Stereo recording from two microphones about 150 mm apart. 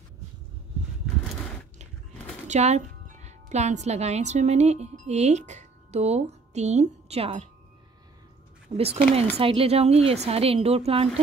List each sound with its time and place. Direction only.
2.4 s a woman's voice: 50° right (ahead or behind)
8.7 s speech: 40° right (ahead or behind)